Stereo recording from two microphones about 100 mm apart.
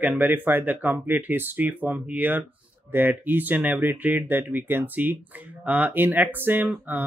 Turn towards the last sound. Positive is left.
turn(degrees=-20)  # may be behind; listen again after turning